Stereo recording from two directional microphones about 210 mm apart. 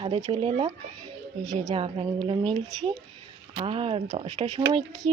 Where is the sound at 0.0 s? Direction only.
25° right (ahead or behind).